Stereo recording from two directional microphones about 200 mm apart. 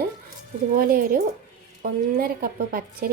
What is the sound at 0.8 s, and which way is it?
A woman's voice, 45° right (ahead or behind).